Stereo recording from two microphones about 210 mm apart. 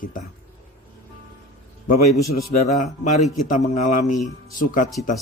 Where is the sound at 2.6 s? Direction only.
35° left (ahead or behind).